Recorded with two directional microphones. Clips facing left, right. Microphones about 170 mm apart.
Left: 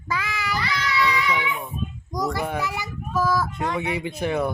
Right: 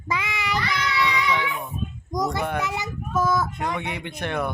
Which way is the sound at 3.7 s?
5° left (ahead or behind).